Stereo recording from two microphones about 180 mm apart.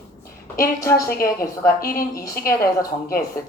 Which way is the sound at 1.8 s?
55° left (ahead or behind).